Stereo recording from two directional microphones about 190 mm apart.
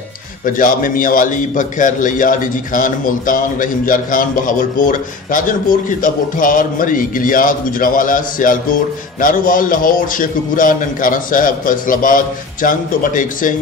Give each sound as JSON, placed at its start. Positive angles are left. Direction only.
{"t": 0.5, "sound": "a man's voice", "side_deg": 45}